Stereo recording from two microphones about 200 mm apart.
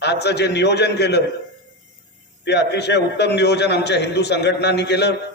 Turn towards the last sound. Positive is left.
turn(degrees=55)  # may be behind; listen again after turning